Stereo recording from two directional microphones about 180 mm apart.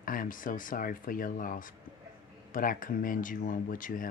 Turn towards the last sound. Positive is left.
turn(degrees=50)  # may be behind; listen again after turning